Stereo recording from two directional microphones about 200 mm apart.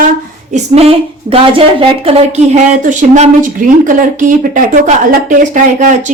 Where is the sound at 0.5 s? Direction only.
30° right (ahead or behind).